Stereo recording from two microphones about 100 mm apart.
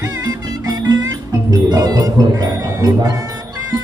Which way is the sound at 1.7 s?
35° right (ahead or behind).